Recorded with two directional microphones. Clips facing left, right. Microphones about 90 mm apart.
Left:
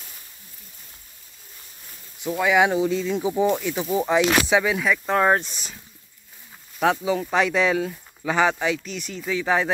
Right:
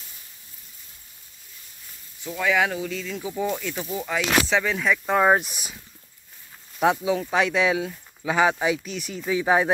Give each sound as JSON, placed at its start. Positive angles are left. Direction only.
{"t": 2.2, "sound": "speech", "side_deg": 15}
{"t": 6.8, "sound": "speech", "side_deg": -5}
{"t": 9.3, "sound": "speech", "side_deg": -15}